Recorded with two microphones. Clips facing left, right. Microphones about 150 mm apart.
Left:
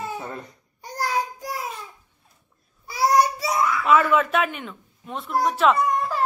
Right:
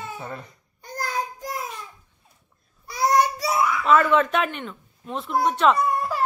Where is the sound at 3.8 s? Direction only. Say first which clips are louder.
Right 1 dB; 10° left (ahead or behind).